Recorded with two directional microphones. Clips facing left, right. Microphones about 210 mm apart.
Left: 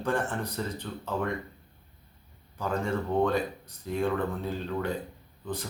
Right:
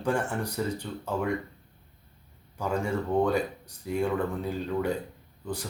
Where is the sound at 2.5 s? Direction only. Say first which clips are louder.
Right 1 dB; 10° right (ahead or behind).